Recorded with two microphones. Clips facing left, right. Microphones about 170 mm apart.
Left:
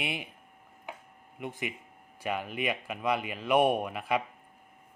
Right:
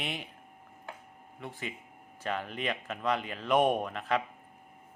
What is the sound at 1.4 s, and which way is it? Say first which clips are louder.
A man's voice: left 4 dB; 15° left (ahead or behind).